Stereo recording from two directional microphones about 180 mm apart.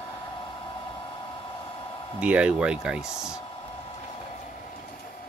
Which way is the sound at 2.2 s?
5° right (ahead or behind).